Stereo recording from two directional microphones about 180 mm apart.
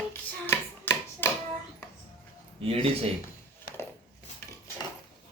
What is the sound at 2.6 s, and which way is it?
Speech, 30° right (ahead or behind).